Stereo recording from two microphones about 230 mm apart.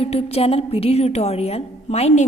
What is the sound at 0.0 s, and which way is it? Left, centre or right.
A woman's voice, left.